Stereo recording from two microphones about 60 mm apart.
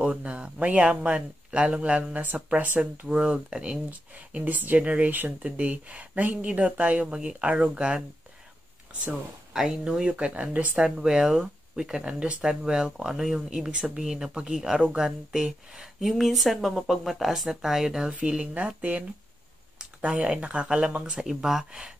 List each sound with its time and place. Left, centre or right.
0.0 s speech: centre
4.1 s speech: right
9.5 s speech: centre
18.4 s speech: right